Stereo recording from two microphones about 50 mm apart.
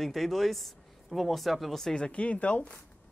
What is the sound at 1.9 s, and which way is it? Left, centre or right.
Speech, left.